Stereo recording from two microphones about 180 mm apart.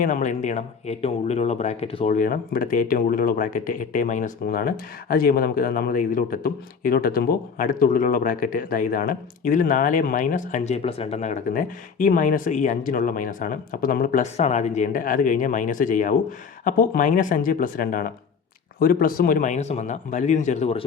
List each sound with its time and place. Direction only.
0.0 s speech: 45° left (ahead or behind)
2.0 s speech: 50° left (ahead or behind)